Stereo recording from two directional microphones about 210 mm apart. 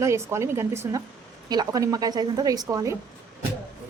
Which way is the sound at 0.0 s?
15° right (ahead or behind).